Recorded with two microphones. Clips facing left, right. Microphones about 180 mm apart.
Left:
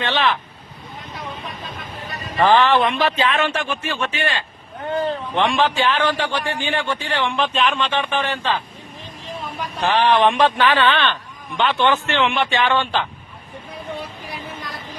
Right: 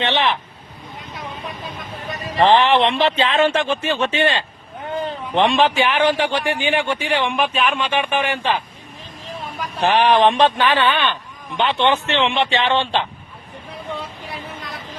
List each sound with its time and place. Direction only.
0.0 s speech: 20° right (ahead or behind)
2.4 s a man's voice: 20° right (ahead or behind)